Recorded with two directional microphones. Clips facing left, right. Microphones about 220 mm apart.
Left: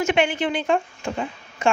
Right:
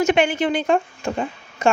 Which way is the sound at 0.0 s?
40° right (ahead or behind).